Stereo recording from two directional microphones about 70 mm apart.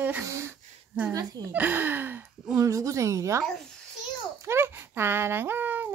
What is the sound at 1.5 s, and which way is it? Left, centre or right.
Child singing, right.